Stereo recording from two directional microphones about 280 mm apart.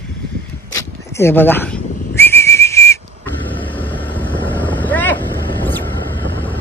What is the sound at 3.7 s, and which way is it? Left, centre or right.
Vehicle, centre.